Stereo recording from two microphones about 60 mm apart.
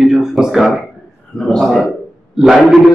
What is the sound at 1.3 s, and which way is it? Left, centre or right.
Speech, centre.